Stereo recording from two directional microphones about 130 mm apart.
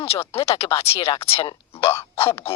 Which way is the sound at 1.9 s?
20° left (ahead or behind).